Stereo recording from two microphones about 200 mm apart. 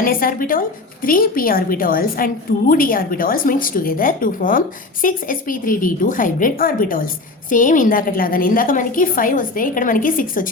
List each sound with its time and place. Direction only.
0.0 s a woman's voice: 45° left (ahead or behind)